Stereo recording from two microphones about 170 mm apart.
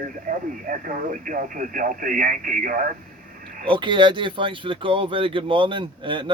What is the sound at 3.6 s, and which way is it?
Speech, 30° right (ahead or behind).